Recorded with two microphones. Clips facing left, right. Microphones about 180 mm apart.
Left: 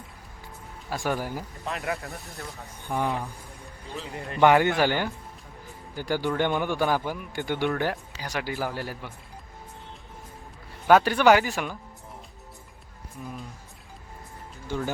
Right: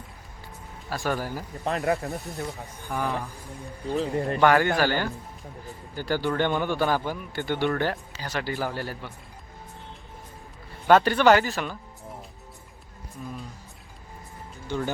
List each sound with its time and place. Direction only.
0.9 s a man's voice: 15° left (ahead or behind)
1.6 s speech: 35° right (ahead or behind)
2.0 s speech: 20° right (ahead or behind)
2.9 s a man's voice: 20° left (ahead or behind)
3.9 s speech: 40° right (ahead or behind)
4.4 s a man's voice: 20° left (ahead or behind)
10.8 s a man's voice: 10° left (ahead or behind)
14.7 s speech: 5° left (ahead or behind)